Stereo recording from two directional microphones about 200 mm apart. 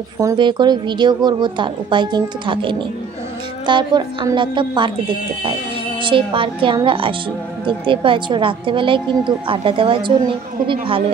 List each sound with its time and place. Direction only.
0.2 s a woman's voice: 20° right (ahead or behind)